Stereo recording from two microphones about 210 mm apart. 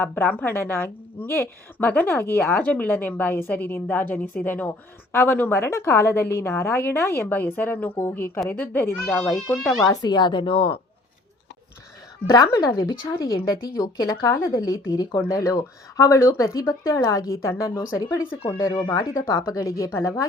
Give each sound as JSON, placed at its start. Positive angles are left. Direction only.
{"t": 0.0, "sound": "a woman's voice", "side_deg": 10}
{"t": 9.8, "sound": "a woman's voice", "side_deg": 20}
{"t": 12.3, "sound": "a woman's voice", "side_deg": 15}